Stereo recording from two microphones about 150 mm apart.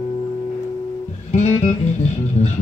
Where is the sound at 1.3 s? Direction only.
50° left (ahead or behind).